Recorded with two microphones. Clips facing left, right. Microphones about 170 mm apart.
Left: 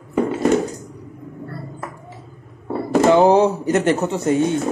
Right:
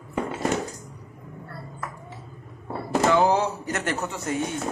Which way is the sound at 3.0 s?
25° left (ahead or behind).